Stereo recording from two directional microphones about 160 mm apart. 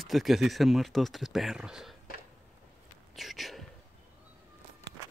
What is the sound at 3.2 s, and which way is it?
Speech, centre (ahead or behind).